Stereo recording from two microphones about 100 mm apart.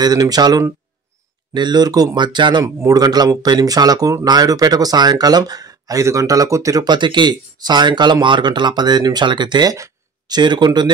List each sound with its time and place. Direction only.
0.0 s speech: 40° right (ahead or behind)
2.6 s speech: 35° right (ahead or behind)